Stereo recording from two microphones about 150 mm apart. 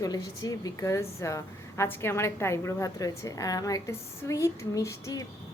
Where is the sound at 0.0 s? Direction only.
25° left (ahead or behind).